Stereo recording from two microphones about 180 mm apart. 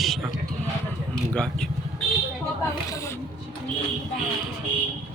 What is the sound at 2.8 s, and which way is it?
Speech, 15° left (ahead or behind).